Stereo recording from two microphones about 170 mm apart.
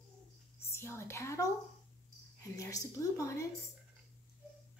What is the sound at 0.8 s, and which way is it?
Speech, 15° left (ahead or behind).